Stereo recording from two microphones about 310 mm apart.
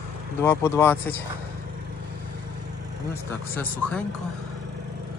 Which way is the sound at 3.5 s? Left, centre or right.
Centre.